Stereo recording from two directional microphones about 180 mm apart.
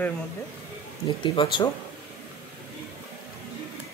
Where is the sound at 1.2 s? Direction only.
25° left (ahead or behind).